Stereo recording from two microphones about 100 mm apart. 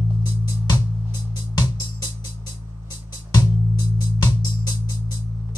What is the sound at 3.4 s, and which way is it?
Music, 45° left (ahead or behind).